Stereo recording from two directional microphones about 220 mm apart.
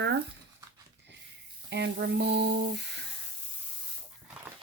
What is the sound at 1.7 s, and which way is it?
A woman's voice, 50° right (ahead or behind).